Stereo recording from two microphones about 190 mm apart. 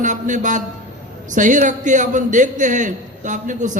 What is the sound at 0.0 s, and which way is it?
A man's voice, 40° right (ahead or behind).